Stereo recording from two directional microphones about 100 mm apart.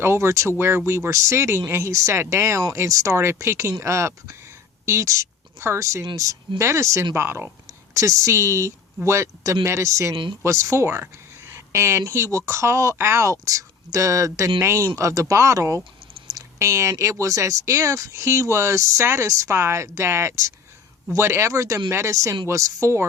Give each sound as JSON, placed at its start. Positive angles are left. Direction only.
{"t": 0.0, "sound": "speech", "side_deg": -25}